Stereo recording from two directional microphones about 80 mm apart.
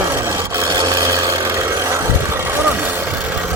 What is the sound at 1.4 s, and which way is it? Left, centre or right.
Vehicle, right.